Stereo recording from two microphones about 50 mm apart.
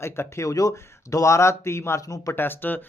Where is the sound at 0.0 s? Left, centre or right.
Left.